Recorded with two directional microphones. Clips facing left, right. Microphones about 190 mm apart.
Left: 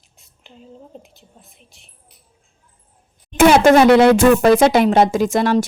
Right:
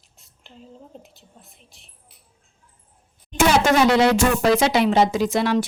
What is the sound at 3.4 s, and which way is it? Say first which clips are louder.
Speech: left 7 dB; 55° left (ahead or behind).